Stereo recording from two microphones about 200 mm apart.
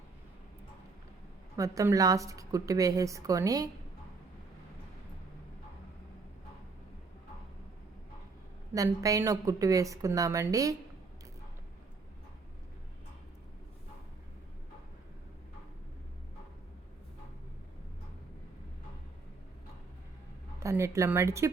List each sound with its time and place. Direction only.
1.5 s a woman's voice: 15° right (ahead or behind)
8.7 s a woman's voice: 15° right (ahead or behind)
20.6 s speech: 15° right (ahead or behind)